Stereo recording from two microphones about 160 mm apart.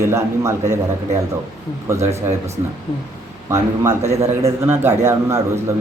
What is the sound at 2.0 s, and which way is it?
Speech, 45° right (ahead or behind).